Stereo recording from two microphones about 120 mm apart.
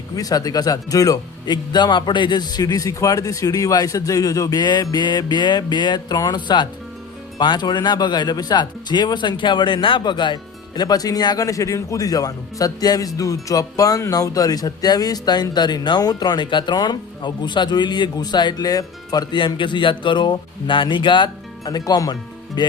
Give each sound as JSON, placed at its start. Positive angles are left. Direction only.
{"t": 0.2, "sound": "speech", "side_deg": 30}